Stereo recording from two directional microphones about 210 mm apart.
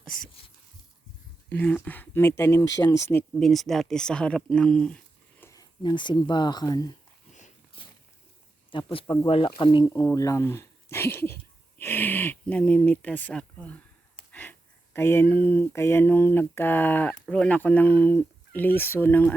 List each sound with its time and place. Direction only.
1.5 s speech: 5° left (ahead or behind)
3.4 s speech: centre (ahead or behind)
5.4 s speech: 15° left (ahead or behind)
8.7 s speech: 25° left (ahead or behind); by 13.7 s 5° left (ahead or behind)
14.9 s speech: 10° left (ahead or behind)